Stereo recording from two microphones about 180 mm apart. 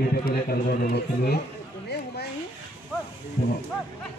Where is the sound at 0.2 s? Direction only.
55° left (ahead or behind).